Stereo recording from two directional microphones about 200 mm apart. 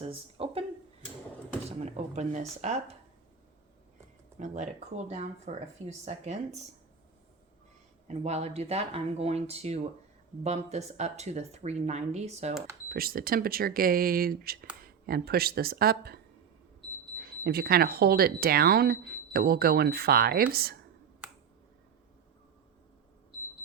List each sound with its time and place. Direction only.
0.0 s a sound: 30° right (ahead or behind)
1.8 s speech: 35° right (ahead or behind)
4.4 s speech: 35° right (ahead or behind)
8.0 s speech: 35° right (ahead or behind)
12.9 s speech: 45° right (ahead or behind)